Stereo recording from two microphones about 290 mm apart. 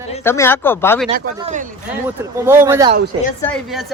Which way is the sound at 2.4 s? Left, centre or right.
Centre.